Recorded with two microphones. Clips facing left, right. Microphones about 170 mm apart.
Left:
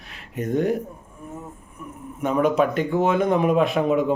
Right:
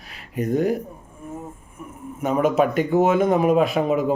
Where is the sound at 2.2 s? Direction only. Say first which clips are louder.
Right 1 dB; 5° right (ahead or behind).